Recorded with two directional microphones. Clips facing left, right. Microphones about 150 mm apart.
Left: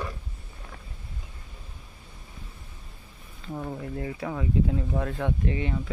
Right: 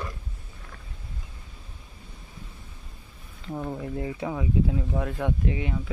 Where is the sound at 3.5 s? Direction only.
5° right (ahead or behind).